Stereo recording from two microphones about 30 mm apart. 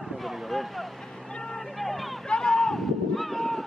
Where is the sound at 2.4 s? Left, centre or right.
Left.